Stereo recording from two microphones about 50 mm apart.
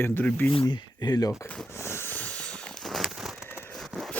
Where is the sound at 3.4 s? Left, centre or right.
Left.